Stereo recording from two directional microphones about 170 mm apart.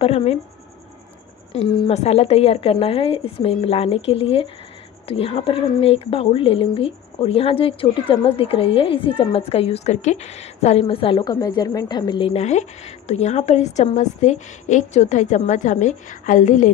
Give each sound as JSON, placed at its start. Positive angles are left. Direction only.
{"t": 0.0, "sound": "speech", "side_deg": 35}
{"t": 1.5, "sound": "speech", "side_deg": 35}